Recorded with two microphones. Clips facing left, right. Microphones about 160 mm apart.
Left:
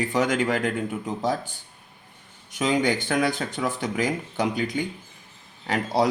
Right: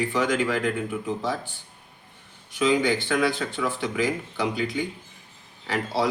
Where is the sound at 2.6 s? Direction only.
45° left (ahead or behind).